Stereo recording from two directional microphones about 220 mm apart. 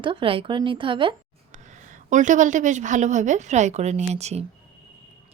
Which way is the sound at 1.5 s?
35° right (ahead or behind).